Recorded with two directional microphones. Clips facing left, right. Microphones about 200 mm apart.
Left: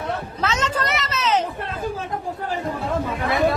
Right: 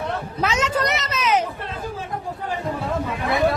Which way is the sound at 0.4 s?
10° right (ahead or behind).